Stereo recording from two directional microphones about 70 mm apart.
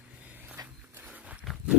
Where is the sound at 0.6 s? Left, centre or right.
Right.